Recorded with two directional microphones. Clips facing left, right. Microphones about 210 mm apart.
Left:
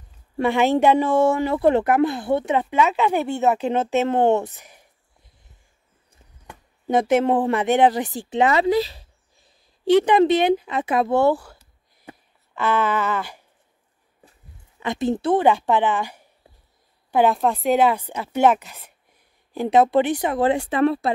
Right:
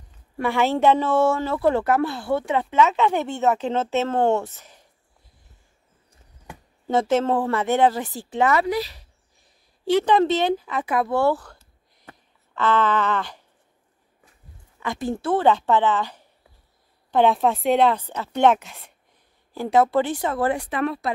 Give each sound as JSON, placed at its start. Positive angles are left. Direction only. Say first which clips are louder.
{"t": 0.4, "sound": "speech", "louder": "left 3 dB", "side_deg": 20}
{"t": 6.9, "sound": "speech", "louder": "left 2 dB", "side_deg": 15}
{"t": 9.8, "sound": "speech", "louder": "left 3 dB", "side_deg": 15}
{"t": 12.0, "sound": "a sound", "louder": "left 5 dB", "side_deg": 10}
{"t": 14.8, "sound": "speech", "louder": "left 4 dB", "side_deg": 20}
{"t": 19.5, "sound": "speech", "louder": "left 2 dB", "side_deg": 20}